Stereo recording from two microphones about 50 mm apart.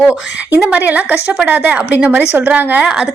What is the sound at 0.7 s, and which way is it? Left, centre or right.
A woman's voice, right.